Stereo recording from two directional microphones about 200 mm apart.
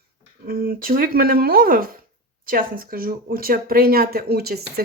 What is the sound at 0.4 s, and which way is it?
Speech, 50° right (ahead or behind).